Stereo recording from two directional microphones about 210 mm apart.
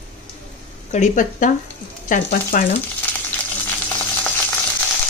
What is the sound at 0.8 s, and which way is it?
A woman's voice, 35° left (ahead or behind).